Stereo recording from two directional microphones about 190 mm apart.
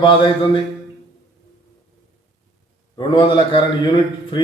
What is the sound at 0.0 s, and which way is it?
Speech, 25° left (ahead or behind).